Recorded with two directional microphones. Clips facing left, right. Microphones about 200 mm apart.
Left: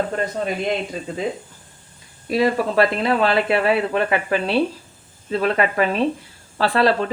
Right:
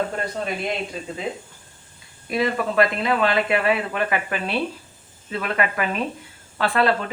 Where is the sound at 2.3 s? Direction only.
35° left (ahead or behind).